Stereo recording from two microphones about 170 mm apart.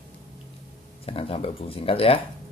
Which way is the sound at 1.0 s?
35° left (ahead or behind).